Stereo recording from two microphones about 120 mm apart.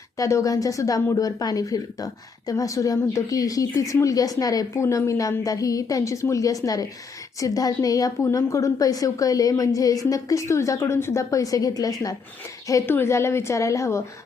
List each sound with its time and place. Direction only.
0.2 s a woman's voice: 25° left (ahead or behind)